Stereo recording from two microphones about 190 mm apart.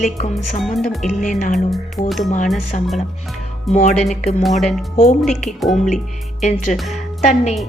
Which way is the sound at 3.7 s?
35° left (ahead or behind).